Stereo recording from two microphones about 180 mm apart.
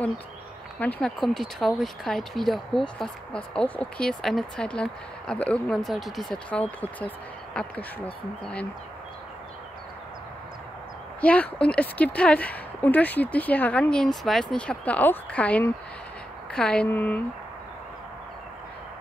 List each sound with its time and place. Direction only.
0.7 s speech: 10° left (ahead or behind)
7.5 s speech: 5° left (ahead or behind)
11.1 s speech: 5° left (ahead or behind)